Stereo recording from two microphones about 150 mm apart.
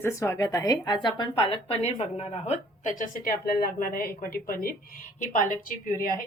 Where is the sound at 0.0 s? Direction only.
20° left (ahead or behind).